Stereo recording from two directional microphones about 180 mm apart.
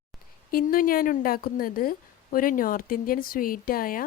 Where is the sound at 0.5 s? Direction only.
55° left (ahead or behind).